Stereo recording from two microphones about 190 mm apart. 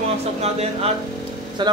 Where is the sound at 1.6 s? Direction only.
25° right (ahead or behind).